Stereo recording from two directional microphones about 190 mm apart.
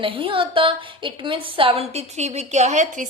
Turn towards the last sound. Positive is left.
turn(degrees=-40)  # may be behind; listen again after turning